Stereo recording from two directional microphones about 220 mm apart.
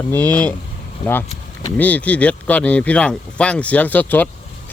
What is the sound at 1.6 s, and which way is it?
Speech, 5° left (ahead or behind).